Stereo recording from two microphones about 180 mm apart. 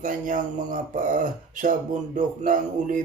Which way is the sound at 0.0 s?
50° right (ahead or behind).